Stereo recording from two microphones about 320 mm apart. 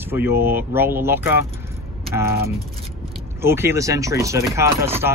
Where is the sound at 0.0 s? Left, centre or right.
Centre.